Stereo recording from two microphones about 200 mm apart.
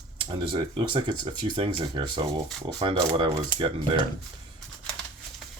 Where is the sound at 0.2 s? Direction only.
25° right (ahead or behind).